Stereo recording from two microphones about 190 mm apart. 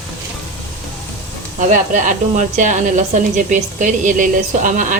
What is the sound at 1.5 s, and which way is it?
A woman's voice, 40° right (ahead or behind).